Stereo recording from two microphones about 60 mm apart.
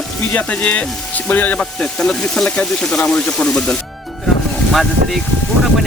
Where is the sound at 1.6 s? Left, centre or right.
Centre.